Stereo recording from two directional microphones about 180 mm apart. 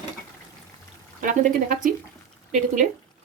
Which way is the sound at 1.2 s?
45° right (ahead or behind).